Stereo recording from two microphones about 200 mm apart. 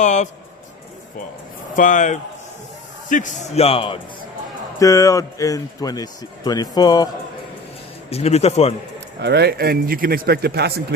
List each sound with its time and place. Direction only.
0.0 s a man's voice: 35° left (ahead or behind)
1.7 s a man's voice: 40° left (ahead or behind)
4.8 s a man's voice: 15° left (ahead or behind)
8.1 s a man's voice: 30° left (ahead or behind)
9.2 s a man's voice: 55° right (ahead or behind)